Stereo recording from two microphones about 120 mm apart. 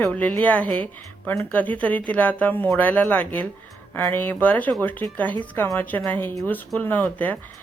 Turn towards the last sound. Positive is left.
turn(degrees=15)  # may be behind; listen again after turning